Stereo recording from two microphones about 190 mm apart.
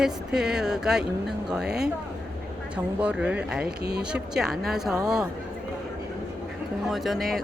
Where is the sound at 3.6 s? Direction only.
60° right (ahead or behind).